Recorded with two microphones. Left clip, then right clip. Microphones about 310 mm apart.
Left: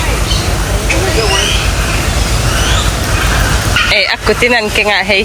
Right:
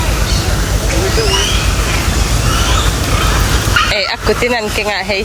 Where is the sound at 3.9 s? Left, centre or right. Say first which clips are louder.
Left 3 dB; centre.